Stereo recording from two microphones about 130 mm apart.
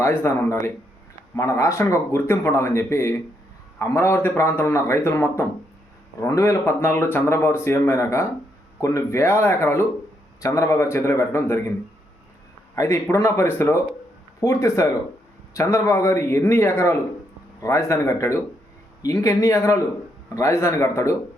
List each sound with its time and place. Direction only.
0.0 s speech: 20° left (ahead or behind)
12.7 s speech: 25° left (ahead or behind)